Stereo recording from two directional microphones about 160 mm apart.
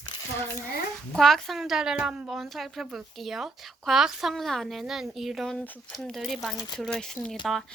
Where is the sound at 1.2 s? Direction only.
Centre (ahead or behind).